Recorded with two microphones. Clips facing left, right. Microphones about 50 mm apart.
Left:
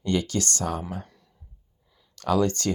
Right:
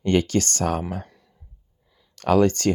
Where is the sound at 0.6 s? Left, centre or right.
Right.